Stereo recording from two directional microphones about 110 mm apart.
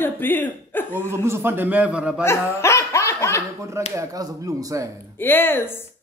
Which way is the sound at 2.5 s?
25° left (ahead or behind).